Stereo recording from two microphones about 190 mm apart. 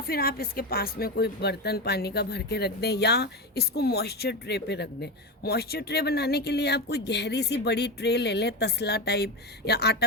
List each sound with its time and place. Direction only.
0.1 s speech: 50° left (ahead or behind)